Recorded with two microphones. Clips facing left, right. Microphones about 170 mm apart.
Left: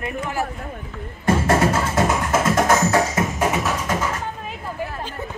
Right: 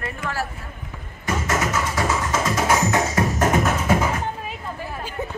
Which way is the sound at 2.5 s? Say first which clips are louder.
Left 3 dB; 50° left (ahead or behind).